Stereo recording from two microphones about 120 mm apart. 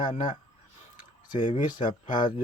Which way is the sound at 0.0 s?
35° left (ahead or behind).